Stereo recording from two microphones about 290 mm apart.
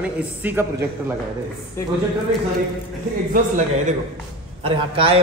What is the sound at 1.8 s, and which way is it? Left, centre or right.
Speech, centre.